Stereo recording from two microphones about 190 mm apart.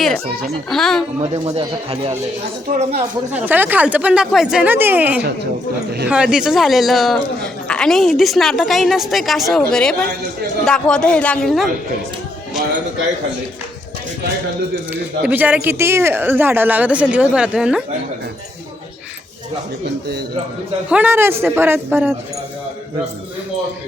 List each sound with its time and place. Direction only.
0.0 s a man's voice: centre (ahead or behind)
1.3 s speech: 35° right (ahead or behind)
3.3 s a man's voice: 10° right (ahead or behind)
15.2 s speech: 10° right (ahead or behind)
20.9 s speech: 10° right (ahead or behind)